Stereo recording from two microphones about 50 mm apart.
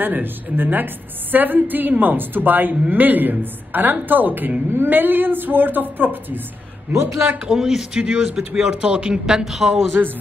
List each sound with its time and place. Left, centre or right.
0.0 s a woman's voice: right
6.9 s a man's voice: right
7.3 s a man's voice: centre